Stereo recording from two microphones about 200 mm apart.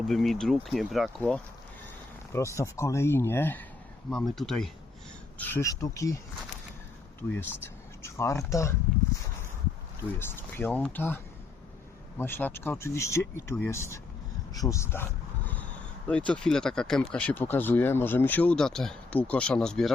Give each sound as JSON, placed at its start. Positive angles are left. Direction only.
{"t": 0.0, "sound": "speech", "side_deg": 0}
{"t": 2.6, "sound": "speech", "side_deg": 15}
{"t": 7.2, "sound": "speech", "side_deg": 10}
{"t": 10.0, "sound": "speech", "side_deg": 10}
{"t": 16.0, "sound": "speech", "side_deg": 5}